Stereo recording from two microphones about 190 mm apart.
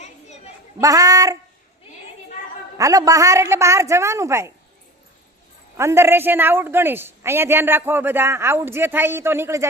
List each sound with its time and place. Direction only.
0.8 s speech: 20° right (ahead or behind)
2.7 s a woman's voice: 20° right (ahead or behind)
5.7 s a woman's voice: 15° right (ahead or behind)